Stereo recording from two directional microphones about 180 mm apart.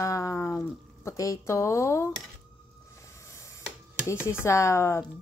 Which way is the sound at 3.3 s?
15° left (ahead or behind).